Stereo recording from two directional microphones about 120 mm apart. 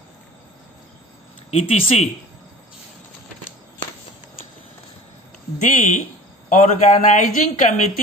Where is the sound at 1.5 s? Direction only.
60° left (ahead or behind).